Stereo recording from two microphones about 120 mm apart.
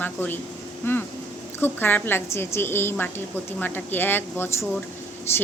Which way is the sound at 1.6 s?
15° left (ahead or behind).